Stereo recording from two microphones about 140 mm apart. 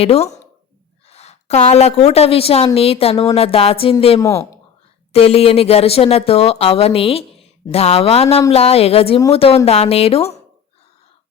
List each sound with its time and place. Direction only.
0.0 s a woman's voice: 45° left (ahead or behind)
4.2 s speech: 20° left (ahead or behind)
5.1 s speech: 45° left (ahead or behind)